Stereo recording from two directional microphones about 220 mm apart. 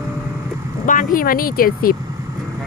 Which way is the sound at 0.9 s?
40° left (ahead or behind).